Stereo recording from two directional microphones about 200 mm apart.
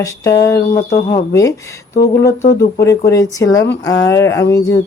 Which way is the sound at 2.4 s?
50° left (ahead or behind).